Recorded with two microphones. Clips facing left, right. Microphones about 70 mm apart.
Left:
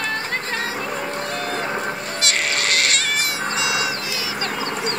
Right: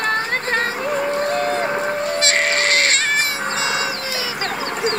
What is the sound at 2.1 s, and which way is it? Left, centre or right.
Cat, right.